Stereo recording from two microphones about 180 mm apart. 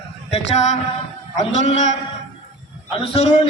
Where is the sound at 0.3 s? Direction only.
35° left (ahead or behind).